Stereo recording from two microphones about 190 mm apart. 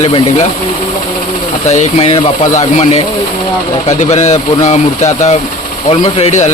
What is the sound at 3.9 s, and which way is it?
Speech, 35° left (ahead or behind).